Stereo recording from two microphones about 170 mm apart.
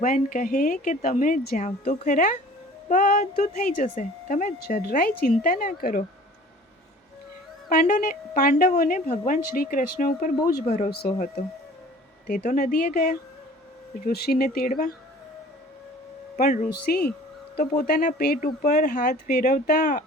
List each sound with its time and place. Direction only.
0.0 s a woman's voice: 50° left (ahead or behind)
7.7 s a woman's voice: 55° left (ahead or behind)
10.8 s speech: 70° left (ahead or behind)
12.3 s a woman's voice: 50° left (ahead or behind)
16.4 s a woman's voice: 50° left (ahead or behind)
16.9 s speech: 70° left (ahead or behind)
18.3 s a woman's voice: 50° left (ahead or behind)
18.7 s speech: 70° left (ahead or behind)